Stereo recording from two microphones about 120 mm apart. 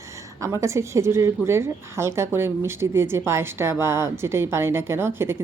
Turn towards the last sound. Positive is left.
turn(degrees=-20)  # may be behind; listen again after turning